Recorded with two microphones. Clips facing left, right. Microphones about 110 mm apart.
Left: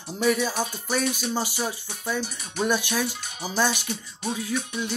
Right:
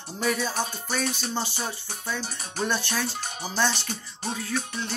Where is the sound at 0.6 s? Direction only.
10° left (ahead or behind).